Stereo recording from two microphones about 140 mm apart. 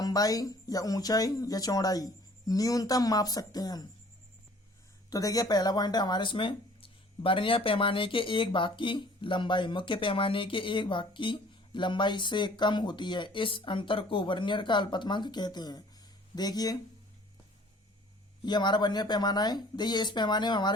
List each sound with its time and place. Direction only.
0.0 s speech: 25° left (ahead or behind)
5.1 s speech: 25° left (ahead or behind)
18.4 s speech: 30° left (ahead or behind)